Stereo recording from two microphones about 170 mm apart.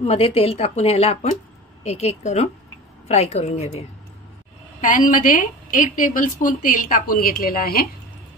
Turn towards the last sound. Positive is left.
turn(degrees=60)  # may be behind; listen again after turning